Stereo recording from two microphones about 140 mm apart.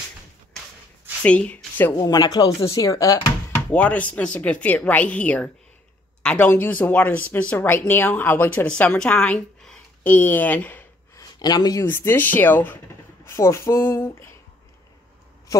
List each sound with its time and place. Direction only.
1.2 s speech: 10° left (ahead or behind)
2.0 s speech: 30° left (ahead or behind)
3.5 s speech: 10° left (ahead or behind)
11.1 s speech: 30° left (ahead or behind)
11.9 s speech: 15° left (ahead or behind)